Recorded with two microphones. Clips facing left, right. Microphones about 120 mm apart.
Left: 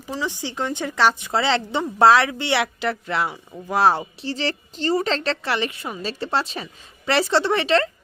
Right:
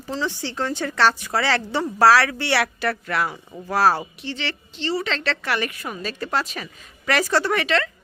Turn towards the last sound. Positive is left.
turn(degrees=30)  # may be behind; listen again after turning